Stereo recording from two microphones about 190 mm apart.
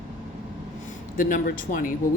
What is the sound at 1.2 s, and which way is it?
Speech, 45° left (ahead or behind).